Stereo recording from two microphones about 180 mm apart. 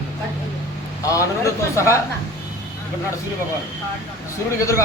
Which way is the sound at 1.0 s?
15° left (ahead or behind).